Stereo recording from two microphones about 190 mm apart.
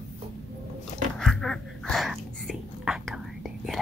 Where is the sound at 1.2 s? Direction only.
Centre (ahead or behind).